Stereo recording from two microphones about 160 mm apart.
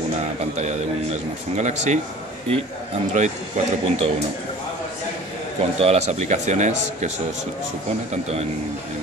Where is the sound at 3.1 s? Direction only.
45° right (ahead or behind).